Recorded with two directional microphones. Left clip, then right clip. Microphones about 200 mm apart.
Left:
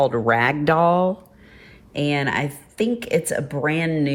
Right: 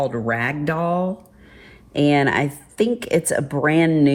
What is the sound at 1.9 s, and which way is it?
Speech, centre (ahead or behind).